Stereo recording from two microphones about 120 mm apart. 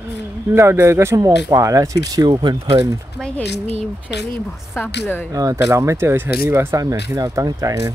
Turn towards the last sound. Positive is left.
turn(degrees=-25)  # may be behind; listen again after turning